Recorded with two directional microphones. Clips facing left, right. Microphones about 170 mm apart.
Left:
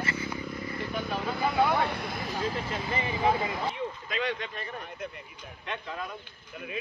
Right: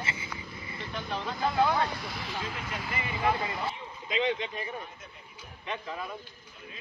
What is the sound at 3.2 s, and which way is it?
Speech, 20° left (ahead or behind).